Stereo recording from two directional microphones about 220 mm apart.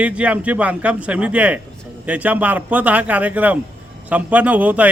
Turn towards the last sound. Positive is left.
turn(degrees=-5)  # may be behind; listen again after turning